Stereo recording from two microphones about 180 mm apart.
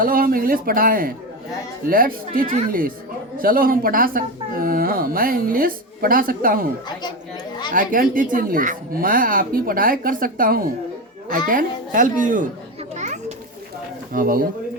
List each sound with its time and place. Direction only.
0.0 s speech: 50° right (ahead or behind)
7.7 s speech: 50° right (ahead or behind)
13.0 s children playing: 40° right (ahead or behind)
14.1 s speech: 50° right (ahead or behind)